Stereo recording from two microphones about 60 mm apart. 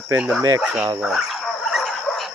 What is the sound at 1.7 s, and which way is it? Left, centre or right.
Dog, centre.